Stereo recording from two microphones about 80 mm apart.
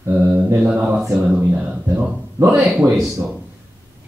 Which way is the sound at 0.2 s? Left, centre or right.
Centre.